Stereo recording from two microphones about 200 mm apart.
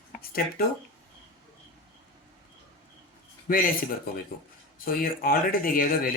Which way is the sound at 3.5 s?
45° left (ahead or behind).